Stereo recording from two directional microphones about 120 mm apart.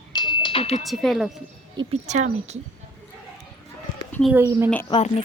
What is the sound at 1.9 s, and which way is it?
Speech, 80° right.